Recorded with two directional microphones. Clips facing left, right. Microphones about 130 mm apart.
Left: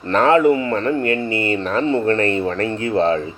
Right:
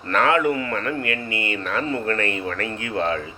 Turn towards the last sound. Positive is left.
turn(degrees=30)  # may be behind; listen again after turning